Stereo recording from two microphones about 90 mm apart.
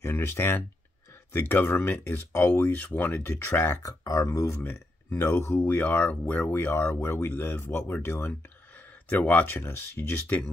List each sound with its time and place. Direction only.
0.0 s speech: 25° left (ahead or behind)
4.6 s speech: 20° left (ahead or behind)